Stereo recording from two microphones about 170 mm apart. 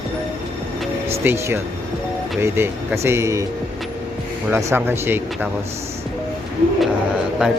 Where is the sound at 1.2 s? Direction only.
15° right (ahead or behind).